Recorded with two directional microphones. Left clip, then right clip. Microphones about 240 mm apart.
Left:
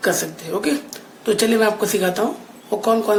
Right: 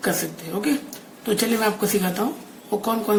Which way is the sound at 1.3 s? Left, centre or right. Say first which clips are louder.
Left 5 dB; centre.